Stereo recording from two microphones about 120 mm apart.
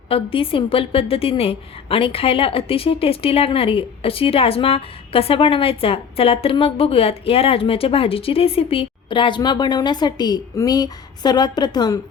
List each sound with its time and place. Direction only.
0.1 s a woman's voice: 50° left (ahead or behind)